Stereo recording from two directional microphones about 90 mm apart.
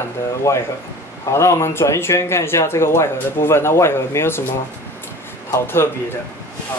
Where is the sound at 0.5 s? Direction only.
30° left (ahead or behind).